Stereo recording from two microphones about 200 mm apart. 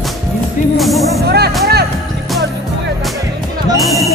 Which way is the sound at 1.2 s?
55° right (ahead or behind).